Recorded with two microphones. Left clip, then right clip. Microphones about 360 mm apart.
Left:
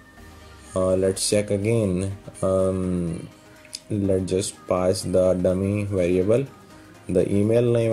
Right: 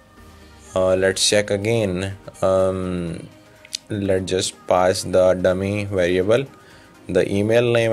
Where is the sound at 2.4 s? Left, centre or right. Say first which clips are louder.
Right 4 dB; right.